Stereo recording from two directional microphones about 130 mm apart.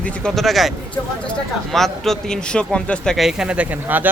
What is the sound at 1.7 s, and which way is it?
Speech, centre (ahead or behind).